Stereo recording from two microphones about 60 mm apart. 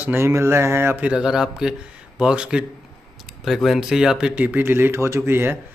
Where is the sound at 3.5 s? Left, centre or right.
Centre.